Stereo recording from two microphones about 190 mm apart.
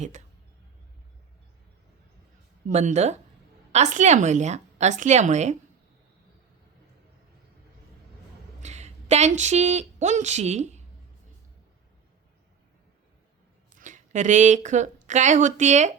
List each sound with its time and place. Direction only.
0.0 s speech: 40° right (ahead or behind)
2.6 s a woman's voice: 40° right (ahead or behind)
8.6 s a sound: 35° right (ahead or behind)
9.4 s a woman's voice: 35° right (ahead or behind)
13.7 s a woman's voice: 40° right (ahead or behind)